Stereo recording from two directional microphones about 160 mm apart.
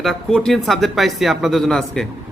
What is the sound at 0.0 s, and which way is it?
Speech, centre (ahead or behind).